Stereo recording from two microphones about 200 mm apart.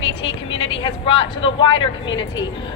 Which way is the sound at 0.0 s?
75° left (ahead or behind).